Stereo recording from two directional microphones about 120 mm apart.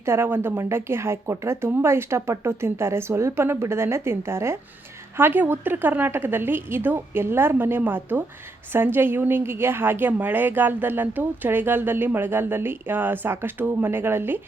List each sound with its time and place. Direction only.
0.0 s a woman's voice: 20° right (ahead or behind)